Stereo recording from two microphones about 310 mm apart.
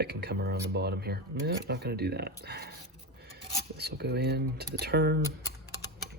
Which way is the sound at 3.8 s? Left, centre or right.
Right.